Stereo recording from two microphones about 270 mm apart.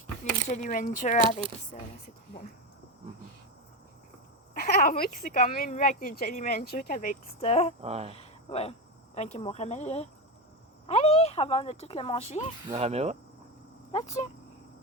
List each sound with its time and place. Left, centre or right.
0.4 s speech: left
4.5 s speech: left
7.8 s speech: right
8.1 s cricket: left
9.1 s speech: left
12.7 s speech: right
13.9 s speech: left